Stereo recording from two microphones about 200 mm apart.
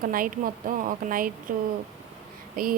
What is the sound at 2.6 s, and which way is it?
Speech, 45° right (ahead or behind).